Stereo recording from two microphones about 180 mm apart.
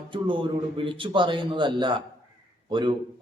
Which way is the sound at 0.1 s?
30° right (ahead or behind).